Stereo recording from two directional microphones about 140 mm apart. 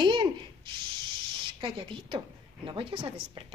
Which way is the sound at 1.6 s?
35° right (ahead or behind).